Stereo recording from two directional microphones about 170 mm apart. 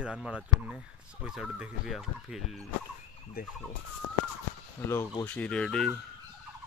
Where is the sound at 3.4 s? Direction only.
60° left (ahead or behind).